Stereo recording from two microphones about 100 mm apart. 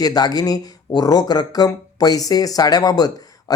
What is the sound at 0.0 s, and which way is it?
Speech, 40° left (ahead or behind).